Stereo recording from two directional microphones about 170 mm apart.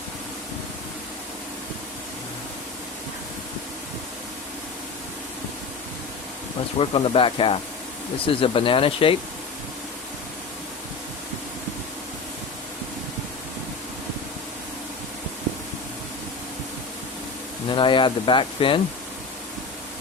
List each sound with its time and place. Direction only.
6.7 s speech: 30° left (ahead or behind)
17.7 s speech: 30° left (ahead or behind)